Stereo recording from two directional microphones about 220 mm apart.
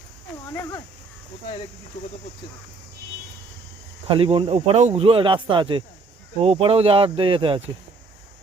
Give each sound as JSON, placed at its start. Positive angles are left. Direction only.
{"t": 4.1, "sound": "speech", "side_deg": -25}